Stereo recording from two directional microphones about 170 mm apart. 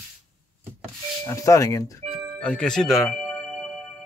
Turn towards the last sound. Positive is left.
turn(degrees=5)  # may be behind; listen again after turning